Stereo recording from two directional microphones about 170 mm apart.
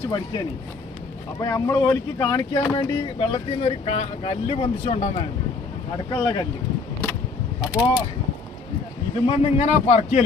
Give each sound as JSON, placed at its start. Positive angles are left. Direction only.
{"t": 1.4, "sound": "speech", "side_deg": 20}
{"t": 2.7, "sound": "speech", "side_deg": 35}
{"t": 6.1, "sound": "speech", "side_deg": 25}
{"t": 7.6, "sound": "speech", "side_deg": 20}
{"t": 9.2, "sound": "speech", "side_deg": 35}